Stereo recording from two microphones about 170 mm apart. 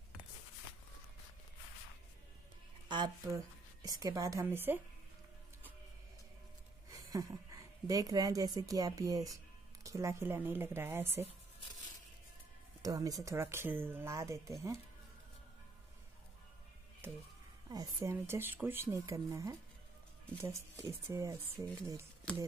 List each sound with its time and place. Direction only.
2.9 s a woman's voice: 25° right (ahead or behind)
6.9 s a woman's voice: 20° right (ahead or behind)
12.8 s speech: 20° right (ahead or behind)
17.6 s speech: 20° right (ahead or behind)